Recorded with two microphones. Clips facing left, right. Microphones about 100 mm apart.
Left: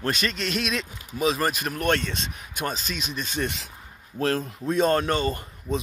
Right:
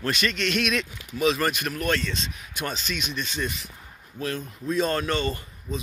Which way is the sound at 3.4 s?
80° left.